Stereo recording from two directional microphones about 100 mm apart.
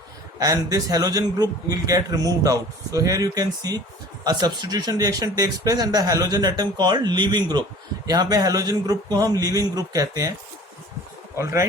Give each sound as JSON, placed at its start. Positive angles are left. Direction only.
{"t": 0.3, "sound": "a man's voice", "side_deg": -40}
{"t": 11.3, "sound": "a man's voice", "side_deg": -30}